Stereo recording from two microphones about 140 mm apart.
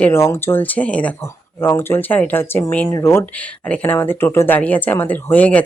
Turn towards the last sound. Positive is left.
turn(degrees=10)  # may be behind; listen again after turning